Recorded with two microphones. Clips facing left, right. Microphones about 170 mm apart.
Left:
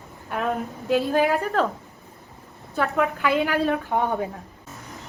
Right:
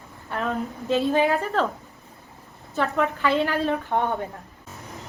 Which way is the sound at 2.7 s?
5° left (ahead or behind).